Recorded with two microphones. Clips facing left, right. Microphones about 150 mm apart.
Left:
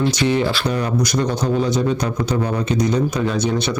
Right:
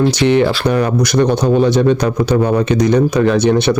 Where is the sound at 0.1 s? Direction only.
70° right (ahead or behind).